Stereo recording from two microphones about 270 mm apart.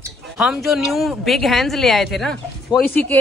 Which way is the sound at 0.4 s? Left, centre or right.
Centre.